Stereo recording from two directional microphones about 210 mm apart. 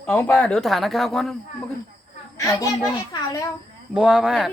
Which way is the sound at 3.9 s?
Centre (ahead or behind).